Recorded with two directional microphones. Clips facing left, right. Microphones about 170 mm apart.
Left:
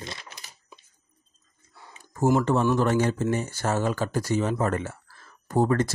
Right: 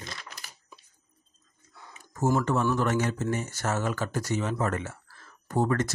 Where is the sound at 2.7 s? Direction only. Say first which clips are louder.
Left 4 dB; 30° left (ahead or behind).